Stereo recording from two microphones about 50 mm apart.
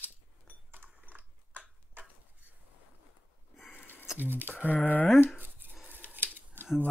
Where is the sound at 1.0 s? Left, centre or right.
Right.